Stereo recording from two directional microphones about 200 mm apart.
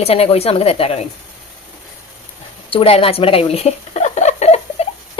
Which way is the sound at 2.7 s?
25° left (ahead or behind).